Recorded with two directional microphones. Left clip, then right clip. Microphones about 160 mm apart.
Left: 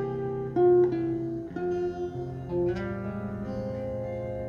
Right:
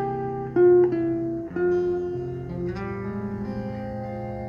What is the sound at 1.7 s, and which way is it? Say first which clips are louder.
Music: right 7 dB; 30° left (ahead or behind).